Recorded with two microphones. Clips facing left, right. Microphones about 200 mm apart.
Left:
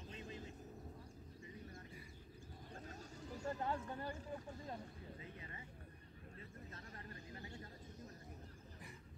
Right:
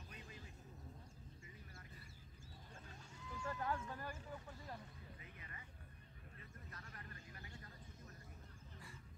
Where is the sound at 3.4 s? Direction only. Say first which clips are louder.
Left 2 dB; 25° left (ahead or behind).